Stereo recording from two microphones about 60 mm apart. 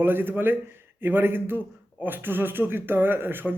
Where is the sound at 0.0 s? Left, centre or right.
Right.